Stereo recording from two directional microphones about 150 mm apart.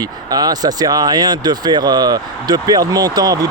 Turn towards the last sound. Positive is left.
turn(degrees=-25)  # may be behind; listen again after turning